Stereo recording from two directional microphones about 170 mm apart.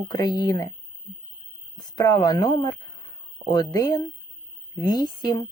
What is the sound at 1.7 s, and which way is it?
Speech, 25° left (ahead or behind).